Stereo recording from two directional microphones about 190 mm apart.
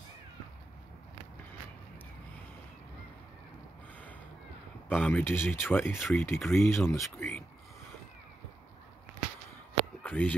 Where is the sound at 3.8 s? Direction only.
10° left (ahead or behind).